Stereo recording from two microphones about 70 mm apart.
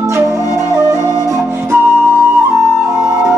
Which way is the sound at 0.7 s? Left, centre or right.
Right.